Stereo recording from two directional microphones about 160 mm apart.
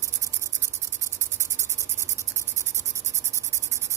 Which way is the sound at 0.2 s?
20° right (ahead or behind).